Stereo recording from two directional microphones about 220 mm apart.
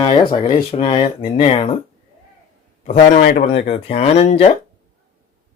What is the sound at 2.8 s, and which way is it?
Speech, 40° left (ahead or behind).